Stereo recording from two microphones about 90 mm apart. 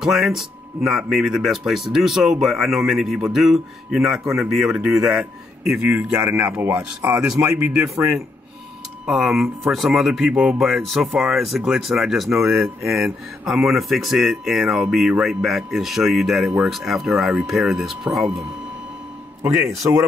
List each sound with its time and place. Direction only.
0.0 s speech: 5° right (ahead or behind)
9.0 s speech: 5° right (ahead or behind)
19.4 s speech: 30° right (ahead or behind)